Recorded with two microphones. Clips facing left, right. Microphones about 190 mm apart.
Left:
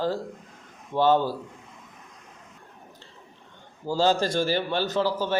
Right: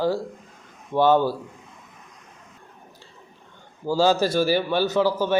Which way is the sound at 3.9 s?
10° right (ahead or behind).